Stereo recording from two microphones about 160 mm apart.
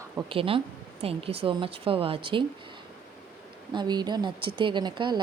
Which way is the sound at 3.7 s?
30° right (ahead or behind).